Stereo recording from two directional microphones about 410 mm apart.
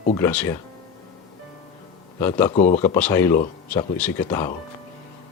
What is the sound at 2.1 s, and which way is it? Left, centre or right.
A man's voice, centre.